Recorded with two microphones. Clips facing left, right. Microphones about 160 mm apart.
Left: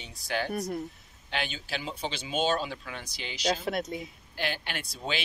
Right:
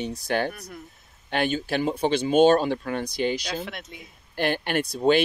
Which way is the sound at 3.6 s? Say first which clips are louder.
Left 6 dB; 40° left (ahead or behind).